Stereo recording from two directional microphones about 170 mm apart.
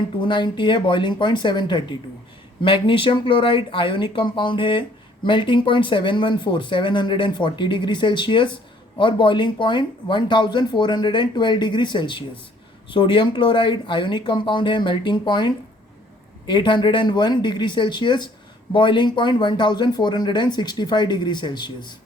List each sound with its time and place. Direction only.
0.2 s speech: 30° left (ahead or behind)